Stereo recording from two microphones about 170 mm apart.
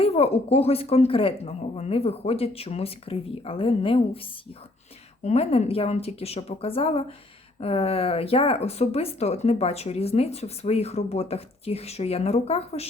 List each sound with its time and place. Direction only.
0.0 s speech: 35° left (ahead or behind)
5.2 s speech: 40° left (ahead or behind)